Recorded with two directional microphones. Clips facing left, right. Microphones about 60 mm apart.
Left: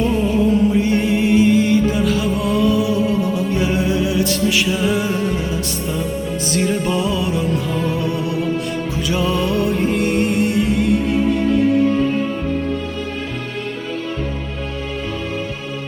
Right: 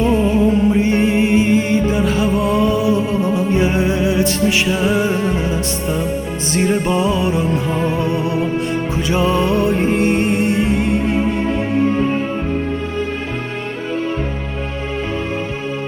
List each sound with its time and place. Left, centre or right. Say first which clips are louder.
0.0 s music: right 2 dB; right
6.5 s music: right 3 dB; right